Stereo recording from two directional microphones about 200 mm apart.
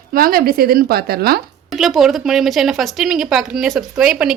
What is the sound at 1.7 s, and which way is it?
Speech, centre (ahead or behind).